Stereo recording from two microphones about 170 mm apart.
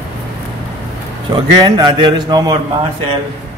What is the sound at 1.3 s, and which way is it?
A man's voice, 25° right (ahead or behind).